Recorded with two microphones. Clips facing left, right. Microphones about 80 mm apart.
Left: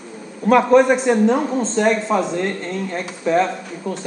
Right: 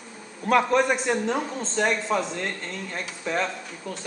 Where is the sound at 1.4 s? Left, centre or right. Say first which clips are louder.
Left 7 dB; left.